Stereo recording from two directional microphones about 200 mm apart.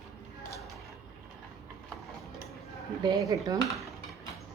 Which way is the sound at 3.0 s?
20° right (ahead or behind).